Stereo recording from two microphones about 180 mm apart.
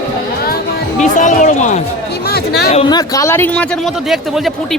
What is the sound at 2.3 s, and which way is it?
Speech, 60° left (ahead or behind).